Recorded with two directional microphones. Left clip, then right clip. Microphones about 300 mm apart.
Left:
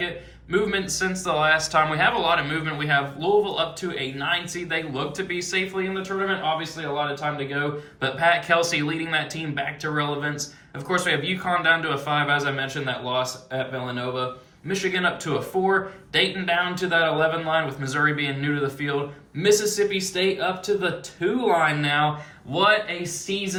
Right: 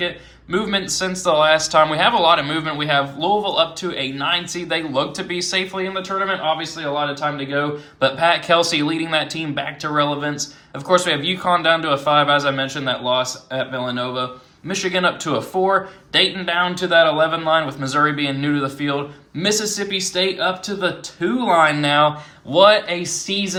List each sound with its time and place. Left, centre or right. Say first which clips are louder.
0.5 s speech: right 3 dB; centre